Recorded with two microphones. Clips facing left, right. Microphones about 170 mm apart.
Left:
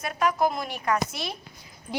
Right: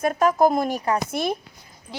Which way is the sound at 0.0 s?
45° right (ahead or behind).